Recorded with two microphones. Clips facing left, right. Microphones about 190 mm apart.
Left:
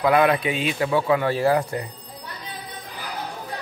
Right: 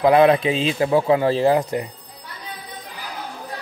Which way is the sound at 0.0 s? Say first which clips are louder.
Right 4 dB; 25° right (ahead or behind).